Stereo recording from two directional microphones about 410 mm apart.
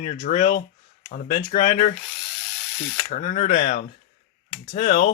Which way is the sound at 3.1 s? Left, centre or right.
Centre.